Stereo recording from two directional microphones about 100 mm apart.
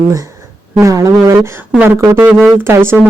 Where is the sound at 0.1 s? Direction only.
35° right (ahead or behind).